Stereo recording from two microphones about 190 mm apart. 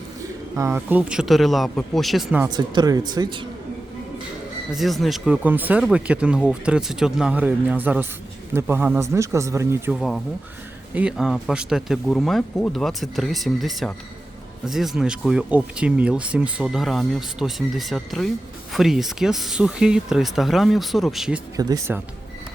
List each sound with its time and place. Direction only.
0.2 s speech: 15° right (ahead or behind)
2.5 s speech: 20° right (ahead or behind)
4.7 s speech: centre (ahead or behind)
9.9 s speech: centre (ahead or behind)
21.5 s speech: 20° right (ahead or behind)